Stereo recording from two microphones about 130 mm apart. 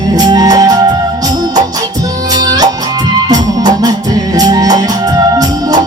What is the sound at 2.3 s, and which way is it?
Music, 30° right (ahead or behind).